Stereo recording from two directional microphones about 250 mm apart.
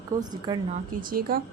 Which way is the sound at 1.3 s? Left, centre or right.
Right.